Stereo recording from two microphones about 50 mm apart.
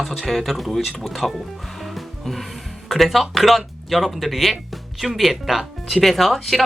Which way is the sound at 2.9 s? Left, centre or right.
Centre.